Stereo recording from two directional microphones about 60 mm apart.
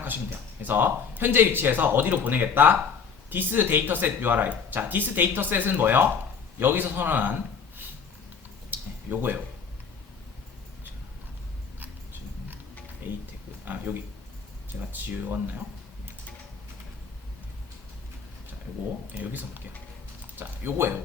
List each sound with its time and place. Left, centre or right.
0.6 s speech: right
8.7 s a sound: right
13.7 s speech: right
19.2 s speech: right
20.7 s speech: right